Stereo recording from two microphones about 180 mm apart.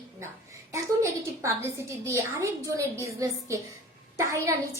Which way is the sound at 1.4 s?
15° right (ahead or behind).